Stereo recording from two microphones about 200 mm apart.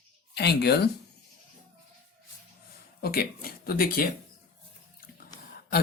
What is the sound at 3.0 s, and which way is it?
Speech, 50° left (ahead or behind).